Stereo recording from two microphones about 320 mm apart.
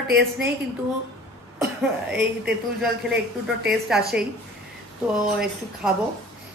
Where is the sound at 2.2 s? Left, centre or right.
Centre.